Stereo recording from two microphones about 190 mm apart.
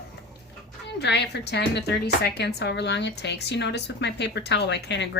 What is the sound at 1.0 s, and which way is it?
A woman's voice, 60° left (ahead or behind).